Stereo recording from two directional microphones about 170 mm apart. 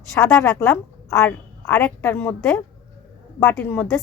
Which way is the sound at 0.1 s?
15° left (ahead or behind).